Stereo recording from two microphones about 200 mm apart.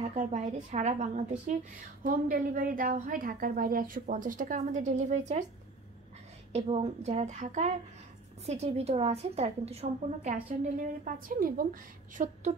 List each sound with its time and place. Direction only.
0.0 s a woman's voice: 35° right (ahead or behind)
6.5 s a woman's voice: 35° right (ahead or behind)